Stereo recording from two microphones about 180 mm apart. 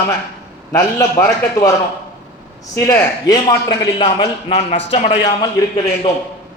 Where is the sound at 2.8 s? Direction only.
20° left (ahead or behind).